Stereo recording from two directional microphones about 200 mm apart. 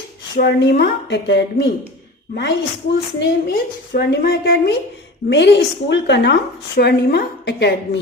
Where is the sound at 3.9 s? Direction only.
55° left (ahead or behind).